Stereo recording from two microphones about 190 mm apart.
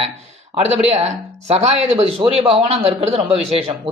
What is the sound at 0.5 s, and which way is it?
Speech, 35° right (ahead or behind).